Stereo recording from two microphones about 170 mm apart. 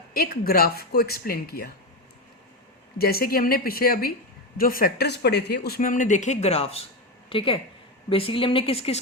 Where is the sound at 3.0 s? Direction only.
65° left (ahead or behind).